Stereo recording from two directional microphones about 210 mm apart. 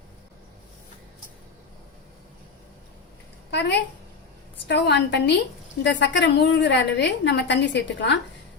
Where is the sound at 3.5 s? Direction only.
55° left (ahead or behind).